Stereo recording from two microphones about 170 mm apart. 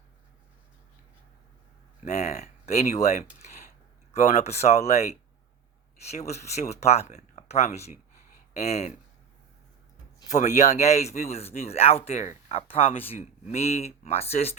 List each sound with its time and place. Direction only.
2.0 s speech: 40° left (ahead or behind)
6.1 s speech: 40° left (ahead or behind)
10.2 s speech: 45° left (ahead or behind)